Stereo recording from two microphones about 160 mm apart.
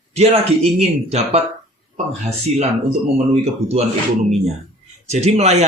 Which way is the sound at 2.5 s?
40° right (ahead or behind).